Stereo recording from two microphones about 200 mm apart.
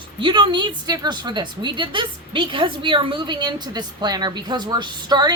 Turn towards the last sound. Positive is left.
turn(degrees=-20)  # may be behind; listen again after turning